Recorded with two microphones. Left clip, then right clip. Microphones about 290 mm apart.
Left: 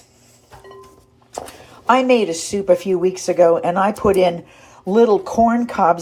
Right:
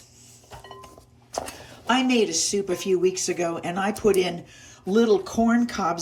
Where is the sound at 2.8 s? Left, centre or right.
Centre.